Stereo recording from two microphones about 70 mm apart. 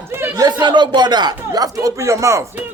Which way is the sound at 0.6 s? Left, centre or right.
Right.